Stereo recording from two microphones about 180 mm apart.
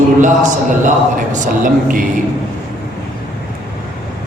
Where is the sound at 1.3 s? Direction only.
45° right (ahead or behind).